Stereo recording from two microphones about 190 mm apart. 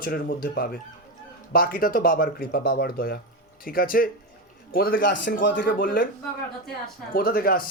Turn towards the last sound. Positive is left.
turn(degrees=50)  # may be behind; listen again after turning